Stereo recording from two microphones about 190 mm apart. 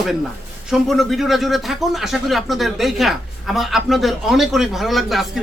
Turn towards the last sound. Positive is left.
turn(degrees=0)  # may be behind; listen again after turning